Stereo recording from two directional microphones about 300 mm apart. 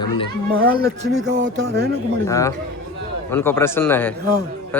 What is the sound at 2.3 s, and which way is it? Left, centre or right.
Speech, centre.